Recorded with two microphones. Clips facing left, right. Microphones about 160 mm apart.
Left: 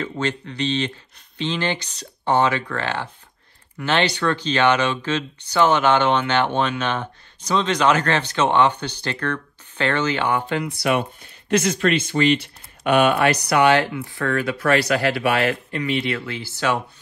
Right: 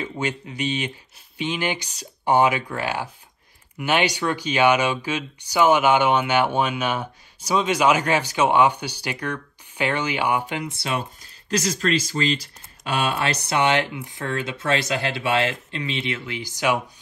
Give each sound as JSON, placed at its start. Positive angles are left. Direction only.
{"t": 0.0, "sound": "speech", "side_deg": -10}
{"t": 10.6, "sound": "speech", "side_deg": -25}
{"t": 11.1, "sound": "speech", "side_deg": -35}